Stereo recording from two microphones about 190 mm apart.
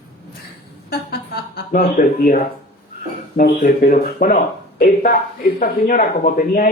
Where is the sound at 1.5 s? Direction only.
50° left (ahead or behind).